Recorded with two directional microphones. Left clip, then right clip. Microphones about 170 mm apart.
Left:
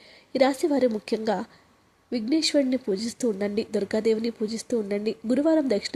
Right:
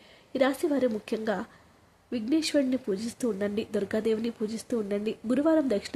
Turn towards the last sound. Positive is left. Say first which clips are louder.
# left 2 dB
turn(degrees=20)  # may be behind; listen again after turning